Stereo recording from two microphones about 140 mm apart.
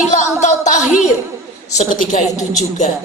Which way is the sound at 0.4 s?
60° left (ahead or behind).